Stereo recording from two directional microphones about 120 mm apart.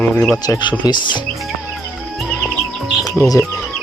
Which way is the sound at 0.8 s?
40° left (ahead or behind).